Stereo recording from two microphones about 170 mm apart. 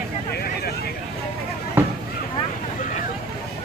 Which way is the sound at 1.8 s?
15° right (ahead or behind).